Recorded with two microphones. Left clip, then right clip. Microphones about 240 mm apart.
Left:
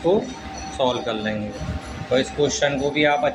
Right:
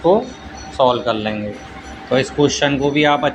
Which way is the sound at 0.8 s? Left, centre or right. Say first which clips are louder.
Right 7 dB; centre.